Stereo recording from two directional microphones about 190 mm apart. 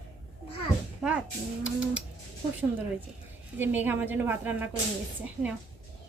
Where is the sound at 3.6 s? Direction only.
10° right (ahead or behind).